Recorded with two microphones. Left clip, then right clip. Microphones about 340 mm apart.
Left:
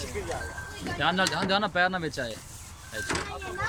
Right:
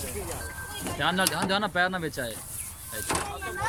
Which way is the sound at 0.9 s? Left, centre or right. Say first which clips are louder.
Even; centre.